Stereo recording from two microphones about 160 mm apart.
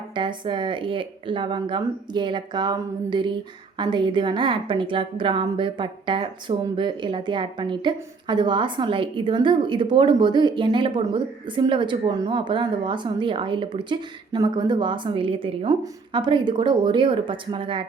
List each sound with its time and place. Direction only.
0.1 s a woman's voice: 30° right (ahead or behind)